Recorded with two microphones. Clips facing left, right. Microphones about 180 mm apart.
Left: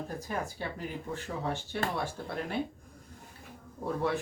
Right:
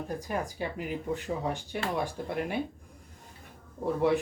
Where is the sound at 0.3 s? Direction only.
15° right (ahead or behind).